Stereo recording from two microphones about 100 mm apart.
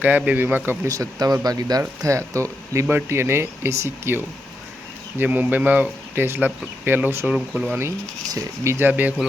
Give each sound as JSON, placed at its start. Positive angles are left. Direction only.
{"t": 0.3, "sound": "speech", "side_deg": -20}
{"t": 0.9, "sound": "speech", "side_deg": -35}
{"t": 7.3, "sound": "speech", "side_deg": -10}
{"t": 8.3, "sound": "speech", "side_deg": -35}
{"t": 8.9, "sound": "speech", "side_deg": -15}